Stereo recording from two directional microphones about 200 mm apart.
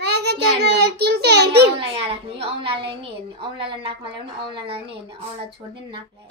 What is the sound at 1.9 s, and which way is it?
A woman's voice, 25° right (ahead or behind).